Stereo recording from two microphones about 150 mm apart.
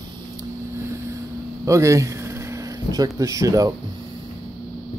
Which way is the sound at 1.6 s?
20° right (ahead or behind).